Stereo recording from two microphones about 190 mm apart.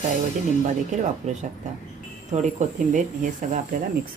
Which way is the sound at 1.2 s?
40° right (ahead or behind).